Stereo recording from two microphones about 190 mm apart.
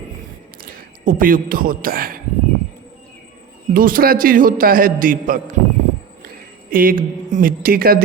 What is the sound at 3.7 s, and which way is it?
Speech, 50° right (ahead or behind).